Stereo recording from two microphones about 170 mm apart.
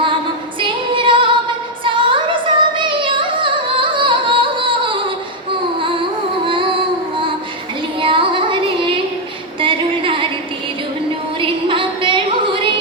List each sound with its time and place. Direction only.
0.6 s female singing: 30° right (ahead or behind)
1.8 s music: 30° right (ahead or behind)
6.4 s music: 30° right (ahead or behind)
7.9 s music: 30° right (ahead or behind)
9.6 s a sound: 30° right (ahead or behind)
11.3 s music: 30° right (ahead or behind)